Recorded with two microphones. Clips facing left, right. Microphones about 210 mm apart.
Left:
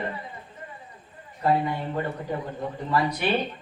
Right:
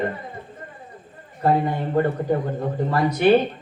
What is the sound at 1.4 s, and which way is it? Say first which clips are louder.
A man's voice: right 4 dB; 50° right (ahead or behind).